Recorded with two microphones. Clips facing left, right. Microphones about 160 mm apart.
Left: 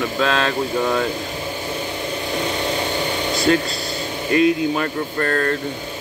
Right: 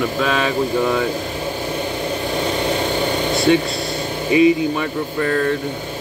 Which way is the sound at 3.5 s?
Centre (ahead or behind).